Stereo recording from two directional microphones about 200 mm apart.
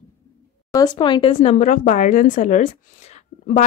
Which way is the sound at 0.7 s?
20° left (ahead or behind).